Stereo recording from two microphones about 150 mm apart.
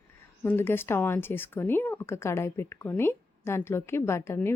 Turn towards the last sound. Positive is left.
turn(degrees=15)  # may be behind; listen again after turning